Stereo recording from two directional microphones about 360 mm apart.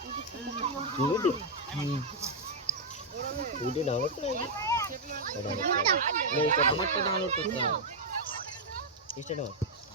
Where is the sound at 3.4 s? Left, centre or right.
Centre.